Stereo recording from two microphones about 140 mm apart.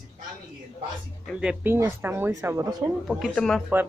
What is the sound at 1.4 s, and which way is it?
Speech, 5° right (ahead or behind).